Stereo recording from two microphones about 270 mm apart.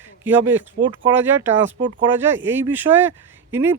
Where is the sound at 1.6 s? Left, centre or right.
Right.